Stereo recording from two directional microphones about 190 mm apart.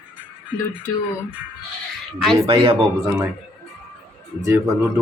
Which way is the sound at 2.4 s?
30° right (ahead or behind).